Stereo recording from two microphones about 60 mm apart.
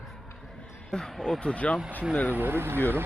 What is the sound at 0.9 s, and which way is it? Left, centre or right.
Speech, centre.